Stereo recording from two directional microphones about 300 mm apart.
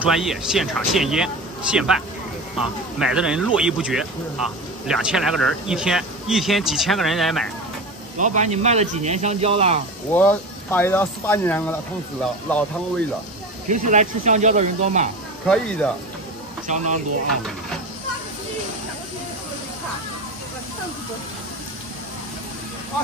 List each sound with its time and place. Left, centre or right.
0.0 s speech: centre
3.0 s speech: centre
8.2 s speech: right
10.1 s speech: centre
13.7 s speech: right
15.4 s speech: centre
16.6 s speech: right